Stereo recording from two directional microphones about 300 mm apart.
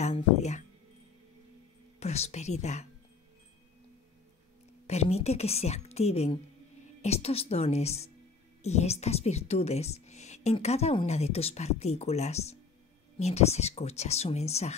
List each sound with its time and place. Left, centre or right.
0.0 s music: left
2.0 s speech: left
4.8 s a woman's voice: left